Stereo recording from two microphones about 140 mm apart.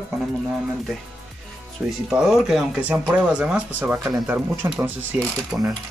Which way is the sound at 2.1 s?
5° right (ahead or behind).